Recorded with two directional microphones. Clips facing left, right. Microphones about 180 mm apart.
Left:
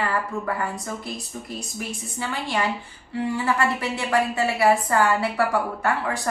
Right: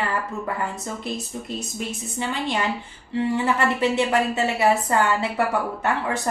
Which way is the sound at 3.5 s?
20° right (ahead or behind).